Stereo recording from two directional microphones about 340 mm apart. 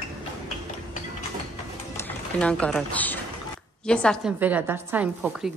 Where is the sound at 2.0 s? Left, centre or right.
Centre.